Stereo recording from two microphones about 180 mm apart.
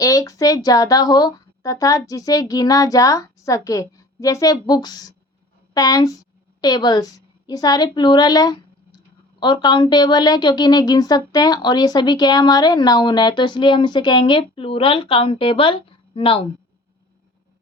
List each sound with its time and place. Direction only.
0.0 s a woman's voice: 20° left (ahead or behind)